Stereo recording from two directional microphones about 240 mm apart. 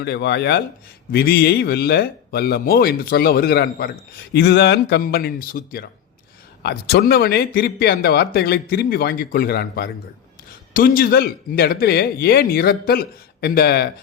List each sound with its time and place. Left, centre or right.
0.0 s speech: left